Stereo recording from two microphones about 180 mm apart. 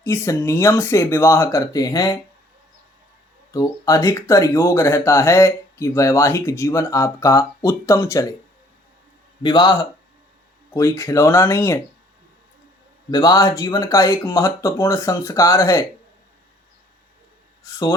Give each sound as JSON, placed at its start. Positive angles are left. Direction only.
{"t": 0.0, "sound": "speech", "side_deg": 15}
{"t": 3.5, "sound": "speech", "side_deg": 20}
{"t": 9.4, "sound": "speech", "side_deg": 25}
{"t": 10.8, "sound": "speech", "side_deg": 15}
{"t": 13.1, "sound": "speech", "side_deg": 20}